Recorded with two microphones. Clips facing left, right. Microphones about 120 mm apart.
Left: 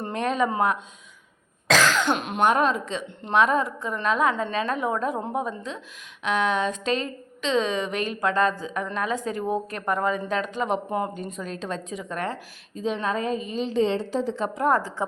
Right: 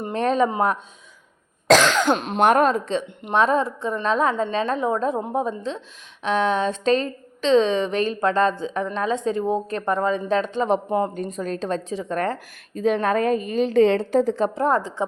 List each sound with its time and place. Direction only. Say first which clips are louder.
0.1 s a woman's voice: right 4 dB; 35° right (ahead or behind)
2.0 s a woman's voice: right 4 dB; 35° right (ahead or behind)
2.4 s a woman's voice: right 4 dB; 50° right (ahead or behind); by 11.1 s 30° right (ahead or behind)
11.1 s a woman's voice: right 6 dB; 45° right (ahead or behind)
12.7 s a woman's voice: right 6 dB; 55° right (ahead or behind); by 15.0 s 20° right (ahead or behind)